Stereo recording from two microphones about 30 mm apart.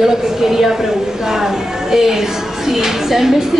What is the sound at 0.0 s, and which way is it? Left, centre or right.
A woman's voice, centre.